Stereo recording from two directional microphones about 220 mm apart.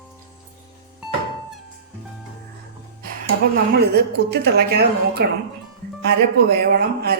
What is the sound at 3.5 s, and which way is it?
Speech, 50° right (ahead or behind).